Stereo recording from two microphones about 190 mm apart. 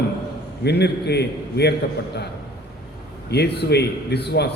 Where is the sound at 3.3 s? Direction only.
60° left (ahead or behind).